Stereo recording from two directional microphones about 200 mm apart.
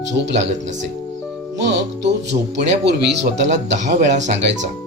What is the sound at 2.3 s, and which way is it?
Speech, 30° right (ahead or behind).